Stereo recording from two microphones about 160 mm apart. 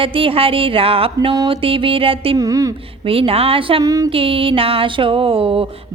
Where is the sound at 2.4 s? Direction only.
20° right (ahead or behind).